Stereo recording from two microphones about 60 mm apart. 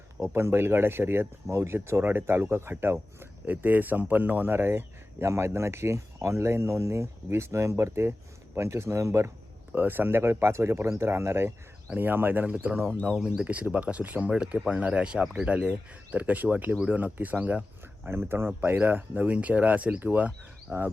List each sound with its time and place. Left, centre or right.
0.2 s speech: right
3.4 s speech: right
5.3 s speech: right
9.7 s speech: right
11.9 s speech: right
18.1 s speech: right